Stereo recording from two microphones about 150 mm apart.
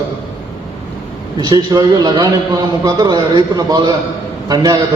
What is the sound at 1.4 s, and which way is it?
A man's voice, 25° right (ahead or behind).